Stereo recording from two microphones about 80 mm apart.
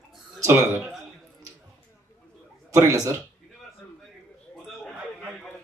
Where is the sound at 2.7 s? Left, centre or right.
Right.